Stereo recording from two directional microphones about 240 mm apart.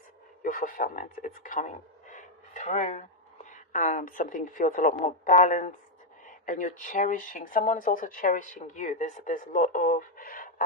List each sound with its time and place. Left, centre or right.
0.4 s speech: left